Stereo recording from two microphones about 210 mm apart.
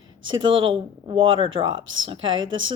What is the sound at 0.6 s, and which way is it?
Speech, 25° right (ahead or behind).